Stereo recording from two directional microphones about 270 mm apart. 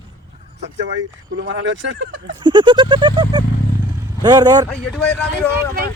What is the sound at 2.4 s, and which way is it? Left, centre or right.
Goat, centre.